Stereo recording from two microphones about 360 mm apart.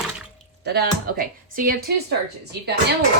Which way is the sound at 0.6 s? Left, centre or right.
Right.